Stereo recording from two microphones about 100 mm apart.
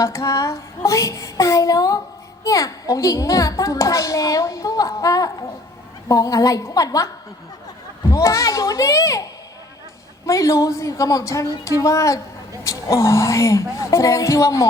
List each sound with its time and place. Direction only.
0.0 s a child's voice: 35° left (ahead or behind)
8.1 s a child's voice: 30° left (ahead or behind)
10.2 s a child's voice: 35° left (ahead or behind)